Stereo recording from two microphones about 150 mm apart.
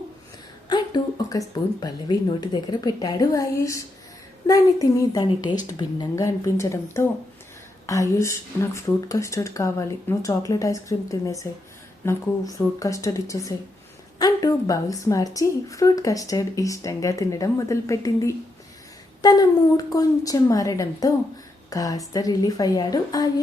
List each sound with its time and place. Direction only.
0.7 s a woman's voice: 25° left (ahead or behind)